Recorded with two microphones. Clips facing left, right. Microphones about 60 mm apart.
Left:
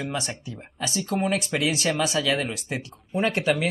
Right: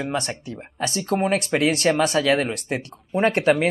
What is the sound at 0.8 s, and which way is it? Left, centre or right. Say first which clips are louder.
Speech: right 4 dB; right.